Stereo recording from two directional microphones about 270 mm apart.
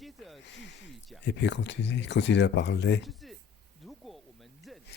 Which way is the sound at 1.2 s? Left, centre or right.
Left.